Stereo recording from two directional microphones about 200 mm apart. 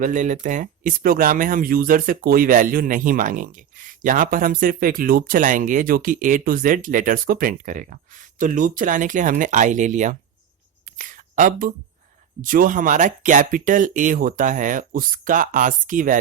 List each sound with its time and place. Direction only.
0.0 s speech: 40° right (ahead or behind)
10.8 s a sound: 40° right (ahead or behind)
12.4 s speech: 45° right (ahead or behind)